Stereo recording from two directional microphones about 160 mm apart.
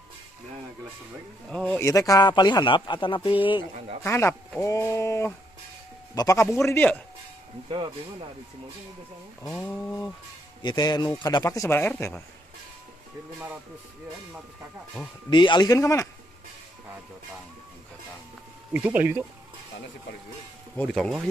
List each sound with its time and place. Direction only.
1.5 s speech: 5° left (ahead or behind)
1.8 s a man's voice: 20° left (ahead or behind)
4.0 s speech: 15° left (ahead or behind)
7.7 s speech: 30° right (ahead or behind)
9.5 s speech: 10° left (ahead or behind)
10.6 s a man's voice: 30° left (ahead or behind)
15.2 s a man's voice: 30° left (ahead or behind)
18.7 s speech: 10° right (ahead or behind)
20.7 s speech: 5° left (ahead or behind)